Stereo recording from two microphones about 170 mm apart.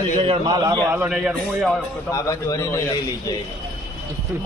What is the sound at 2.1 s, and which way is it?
Speech, 20° left (ahead or behind).